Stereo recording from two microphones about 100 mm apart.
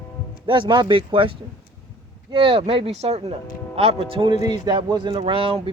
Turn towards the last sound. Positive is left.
turn(degrees=-65)  # may be behind; listen again after turning